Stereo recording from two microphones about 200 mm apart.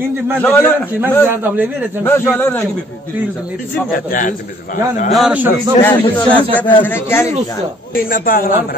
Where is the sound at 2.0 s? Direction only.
10° left (ahead or behind).